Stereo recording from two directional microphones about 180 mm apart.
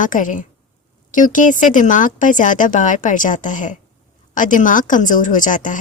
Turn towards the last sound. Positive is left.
turn(degrees=45)  # may be behind; listen again after turning